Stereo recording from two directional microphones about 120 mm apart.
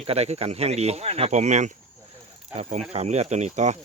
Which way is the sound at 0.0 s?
60° right (ahead or behind).